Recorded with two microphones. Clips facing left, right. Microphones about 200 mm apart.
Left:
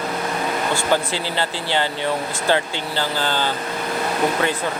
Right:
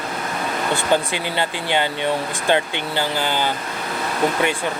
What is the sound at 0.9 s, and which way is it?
Speech, 15° right (ahead or behind).